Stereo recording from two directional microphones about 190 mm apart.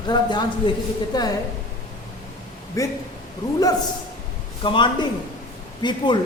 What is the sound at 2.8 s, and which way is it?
Speech, 15° left (ahead or behind).